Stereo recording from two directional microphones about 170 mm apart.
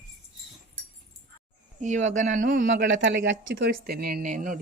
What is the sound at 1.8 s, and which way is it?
Speech, 45° right (ahead or behind).